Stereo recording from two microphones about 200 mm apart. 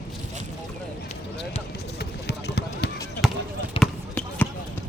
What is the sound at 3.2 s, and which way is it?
Basketball bounce, centre (ahead or behind).